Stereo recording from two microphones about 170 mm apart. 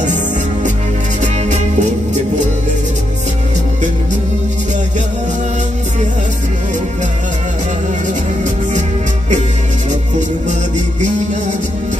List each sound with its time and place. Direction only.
1.2 s music: 45° right (ahead or behind)